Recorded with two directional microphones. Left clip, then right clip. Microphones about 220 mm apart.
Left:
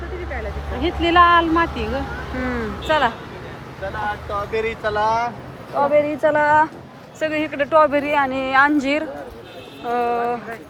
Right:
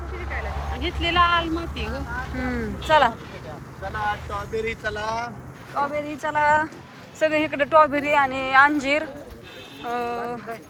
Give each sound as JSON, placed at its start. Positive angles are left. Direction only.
{"t": 0.8, "sound": "speech", "side_deg": 30}
{"t": 2.4, "sound": "speech", "side_deg": 5}
{"t": 4.5, "sound": "speech", "side_deg": 15}
{"t": 7.2, "sound": "speech", "side_deg": 5}